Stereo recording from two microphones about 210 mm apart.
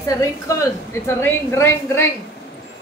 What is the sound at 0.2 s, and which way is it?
A woman's voice, 15° left (ahead or behind).